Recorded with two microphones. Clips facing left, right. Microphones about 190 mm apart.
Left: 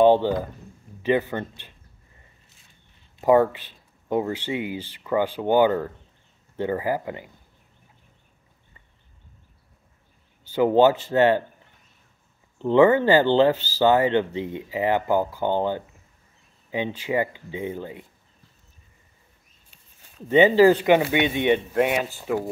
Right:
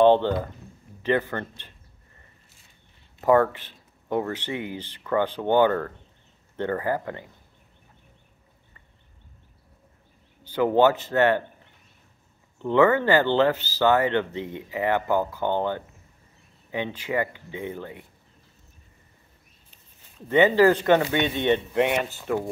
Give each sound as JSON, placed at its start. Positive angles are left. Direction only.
{"t": 0.0, "sound": "speech", "side_deg": 10}
{"t": 3.2, "sound": "speech", "side_deg": 15}
{"t": 10.5, "sound": "speech", "side_deg": 15}
{"t": 12.6, "sound": "speech", "side_deg": 20}
{"t": 20.2, "sound": "speech", "side_deg": 15}